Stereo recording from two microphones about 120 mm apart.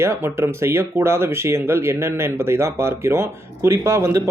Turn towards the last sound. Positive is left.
turn(degrees=-25)  # may be behind; listen again after turning